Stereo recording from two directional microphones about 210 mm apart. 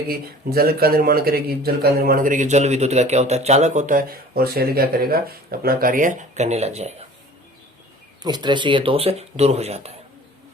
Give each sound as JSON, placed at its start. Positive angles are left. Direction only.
{"t": 0.1, "sound": "speech", "side_deg": -45}
{"t": 8.2, "sound": "speech", "side_deg": -20}